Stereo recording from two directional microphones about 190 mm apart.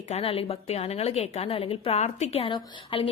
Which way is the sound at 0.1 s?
30° left (ahead or behind).